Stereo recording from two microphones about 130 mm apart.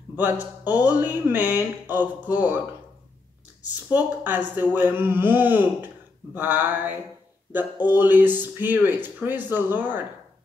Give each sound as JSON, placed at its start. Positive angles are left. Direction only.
{"t": 0.1, "sound": "speech", "side_deg": -15}
{"t": 3.9, "sound": "speech", "side_deg": -15}